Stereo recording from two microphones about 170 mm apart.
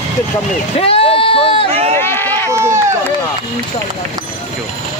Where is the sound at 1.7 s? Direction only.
35° right (ahead or behind).